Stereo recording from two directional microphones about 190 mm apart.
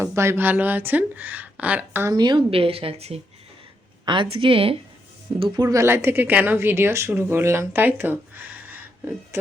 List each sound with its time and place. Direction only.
0.0 s a woman's voice: 15° right (ahead or behind)